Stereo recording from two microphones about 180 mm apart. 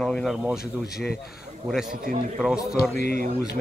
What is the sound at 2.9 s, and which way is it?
Speech, 60° left (ahead or behind).